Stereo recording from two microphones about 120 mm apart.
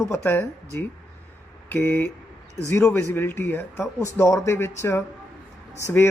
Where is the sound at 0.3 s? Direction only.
20° left (ahead or behind).